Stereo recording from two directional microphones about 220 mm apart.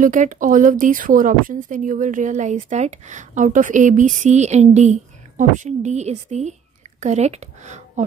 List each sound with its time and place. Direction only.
0.0 s speech: 35° right (ahead or behind)